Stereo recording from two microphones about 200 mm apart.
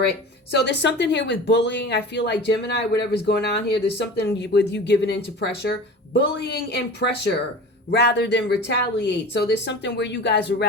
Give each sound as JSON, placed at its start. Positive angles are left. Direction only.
{"t": 0.6, "sound": "speech", "side_deg": 60}